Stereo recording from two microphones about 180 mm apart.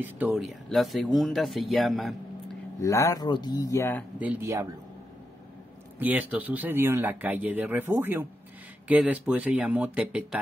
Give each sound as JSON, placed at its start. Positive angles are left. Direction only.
{"t": 0.0, "sound": "speech", "side_deg": -5}
{"t": 2.8, "sound": "speech", "side_deg": 15}
{"t": 4.2, "sound": "speech", "side_deg": -10}
{"t": 5.9, "sound": "speech", "side_deg": -10}